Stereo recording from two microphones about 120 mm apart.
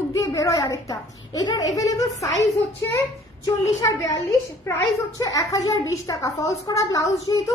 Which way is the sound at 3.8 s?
25° left (ahead or behind).